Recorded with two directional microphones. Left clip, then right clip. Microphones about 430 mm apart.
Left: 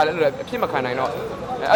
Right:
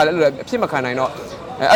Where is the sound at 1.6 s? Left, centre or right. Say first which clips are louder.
Right 5 dB; right.